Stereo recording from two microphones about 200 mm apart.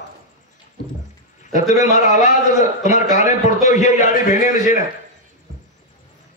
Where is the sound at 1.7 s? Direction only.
35° left (ahead or behind).